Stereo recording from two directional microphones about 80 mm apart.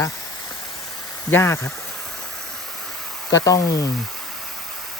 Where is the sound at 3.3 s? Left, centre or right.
Left.